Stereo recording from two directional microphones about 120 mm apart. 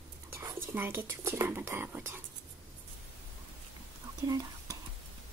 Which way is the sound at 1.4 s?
20° right (ahead or behind).